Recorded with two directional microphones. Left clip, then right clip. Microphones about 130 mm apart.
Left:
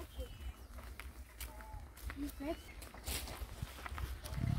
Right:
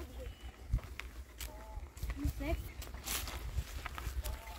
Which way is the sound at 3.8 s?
35° right (ahead or behind).